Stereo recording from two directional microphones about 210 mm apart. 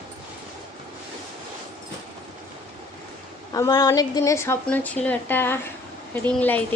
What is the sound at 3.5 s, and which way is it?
A woman's voice, 20° left (ahead or behind).